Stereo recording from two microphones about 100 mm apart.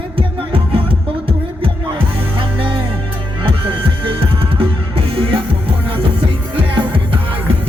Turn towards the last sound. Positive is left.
turn(degrees=-60)  # may be behind; listen again after turning